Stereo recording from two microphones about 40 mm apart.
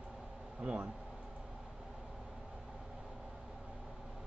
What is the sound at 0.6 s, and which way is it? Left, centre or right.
Speech, right.